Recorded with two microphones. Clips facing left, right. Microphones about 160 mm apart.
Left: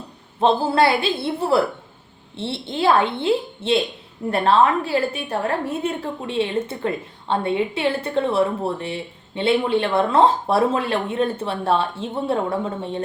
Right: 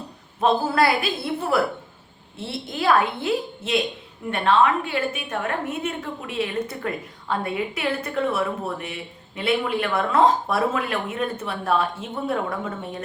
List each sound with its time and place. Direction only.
0.3 s a woman's voice: 30° left (ahead or behind)